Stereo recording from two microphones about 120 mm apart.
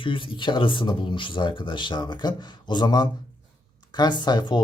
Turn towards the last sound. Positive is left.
turn(degrees=35)  # may be behind; listen again after turning